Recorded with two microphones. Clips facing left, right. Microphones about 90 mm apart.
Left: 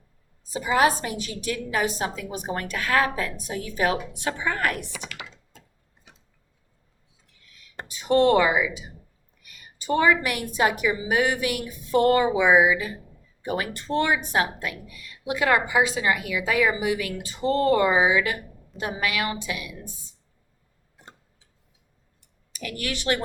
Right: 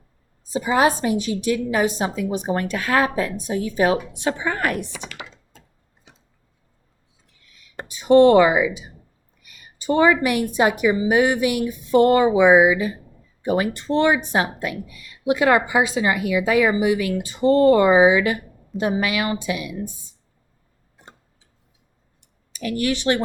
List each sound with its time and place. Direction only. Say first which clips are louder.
0.5 s a woman's voice: right 3 dB; 25° right (ahead or behind)
7.9 s a woman's voice: right 7 dB; 20° right (ahead or behind)
9.8 s a woman's voice: right 4 dB; 20° right (ahead or behind)
22.2 s a sound: right 7 dB; 25° right (ahead or behind)